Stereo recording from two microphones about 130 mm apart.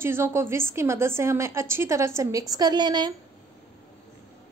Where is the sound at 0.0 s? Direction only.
20° right (ahead or behind).